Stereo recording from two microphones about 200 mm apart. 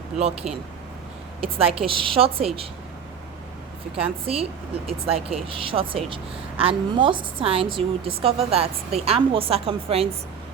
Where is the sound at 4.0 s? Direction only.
30° right (ahead or behind).